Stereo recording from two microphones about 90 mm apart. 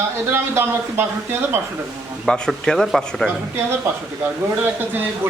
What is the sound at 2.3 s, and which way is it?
Speech, 10° left (ahead or behind).